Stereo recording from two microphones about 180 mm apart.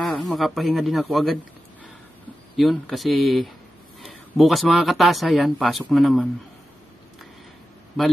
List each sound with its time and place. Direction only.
0.0 s speech: centre (ahead or behind)
2.5 s a man's voice: centre (ahead or behind)